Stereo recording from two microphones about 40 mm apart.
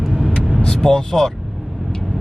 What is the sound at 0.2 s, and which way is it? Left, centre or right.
Vehicle, centre.